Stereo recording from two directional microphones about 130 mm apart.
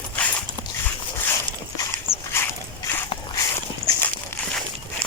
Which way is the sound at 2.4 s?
20° left (ahead or behind).